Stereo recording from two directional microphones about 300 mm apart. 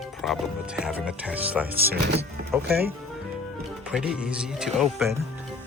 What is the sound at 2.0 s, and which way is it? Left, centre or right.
Speech, right.